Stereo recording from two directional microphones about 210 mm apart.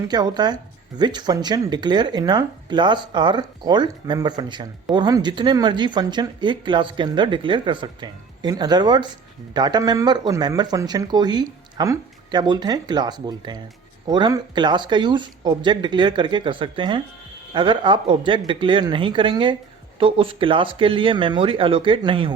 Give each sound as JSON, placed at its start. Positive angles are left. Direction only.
{"t": 0.1, "sound": "speech", "side_deg": -20}